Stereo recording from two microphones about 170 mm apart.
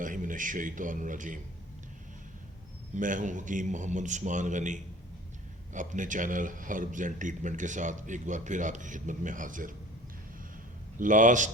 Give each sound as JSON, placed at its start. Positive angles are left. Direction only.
{"t": 0.0, "sound": "speech", "side_deg": -50}
{"t": 2.9, "sound": "speech", "side_deg": -50}
{"t": 11.0, "sound": "speech", "side_deg": -50}